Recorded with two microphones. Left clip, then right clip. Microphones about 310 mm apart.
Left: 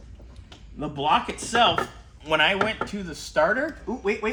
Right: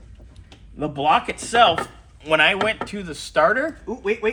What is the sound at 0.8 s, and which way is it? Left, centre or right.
Speech, centre.